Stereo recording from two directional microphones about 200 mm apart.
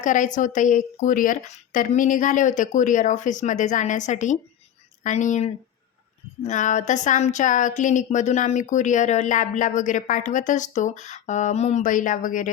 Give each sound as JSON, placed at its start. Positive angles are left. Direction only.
{"t": 0.0, "sound": "speech", "side_deg": 40}